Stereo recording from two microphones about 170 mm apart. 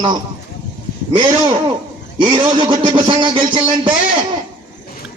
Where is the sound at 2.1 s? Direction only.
25° right (ahead or behind).